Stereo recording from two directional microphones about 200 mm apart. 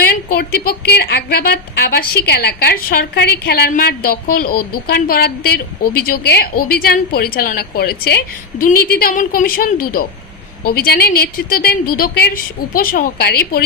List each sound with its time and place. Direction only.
0.0 s a woman's voice: 50° left (ahead or behind)